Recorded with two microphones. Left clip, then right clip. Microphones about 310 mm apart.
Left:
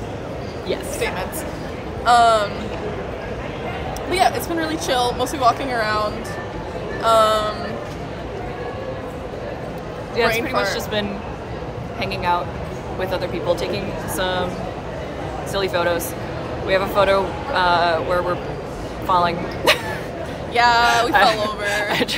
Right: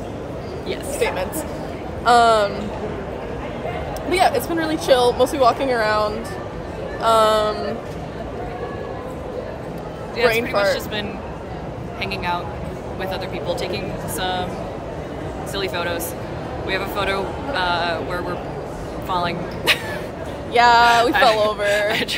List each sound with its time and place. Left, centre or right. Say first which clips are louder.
0.9 s speech: right 2 dB; centre
4.1 s speech: right 1 dB; centre
10.4 s speech: right 2 dB; centre
13.6 s speech: left 1 dB; centre
15.5 s speech: left 4 dB; centre
20.5 s speech: right 2 dB; centre
21.1 s speech: even; centre
21.4 s speech: right 4 dB; centre